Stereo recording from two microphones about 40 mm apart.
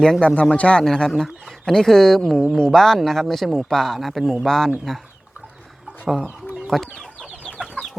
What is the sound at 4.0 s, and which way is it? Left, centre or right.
Speech, centre.